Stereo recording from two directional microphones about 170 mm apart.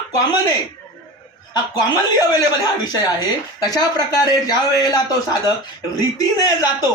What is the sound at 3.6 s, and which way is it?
Speech, 25° left (ahead or behind).